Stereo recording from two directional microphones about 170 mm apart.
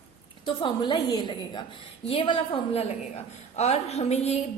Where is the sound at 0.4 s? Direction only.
25° left (ahead or behind).